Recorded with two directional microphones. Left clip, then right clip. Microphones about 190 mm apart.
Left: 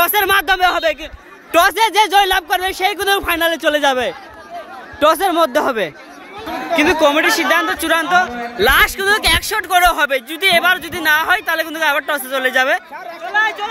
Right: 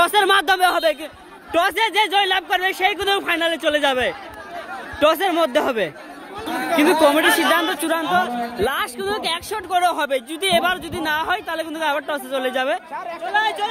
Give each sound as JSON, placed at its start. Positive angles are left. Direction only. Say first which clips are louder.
{"t": 0.0, "sound": "speech", "louder": "left 2 dB", "side_deg": -5}
{"t": 1.5, "sound": "speech", "louder": "left 6 dB", "side_deg": 20}
{"t": 6.8, "sound": "speech", "louder": "left 2 dB", "side_deg": -5}
{"t": 13.2, "sound": "chatter", "louder": "left 3 dB", "side_deg": -25}